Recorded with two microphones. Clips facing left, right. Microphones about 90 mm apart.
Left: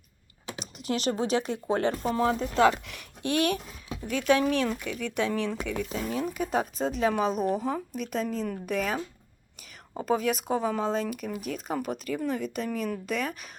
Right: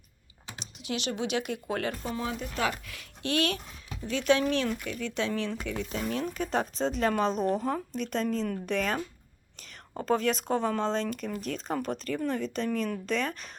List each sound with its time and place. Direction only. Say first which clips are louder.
0.6 s speech: left 5 dB; 40° left (ahead or behind)
2.8 s speech: left 3 dB; 20° left (ahead or behind)